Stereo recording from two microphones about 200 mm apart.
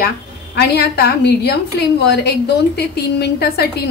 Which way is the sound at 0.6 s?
55° left (ahead or behind).